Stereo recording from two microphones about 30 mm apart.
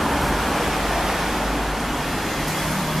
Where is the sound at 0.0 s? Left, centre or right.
Centre.